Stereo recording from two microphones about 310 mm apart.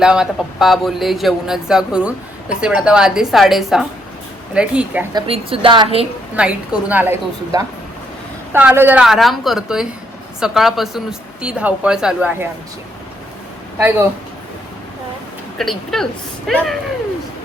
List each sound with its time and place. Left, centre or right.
0.0 s speech: centre
5.2 s a woman's voice: centre
6.3 s speech: centre
15.5 s speech: centre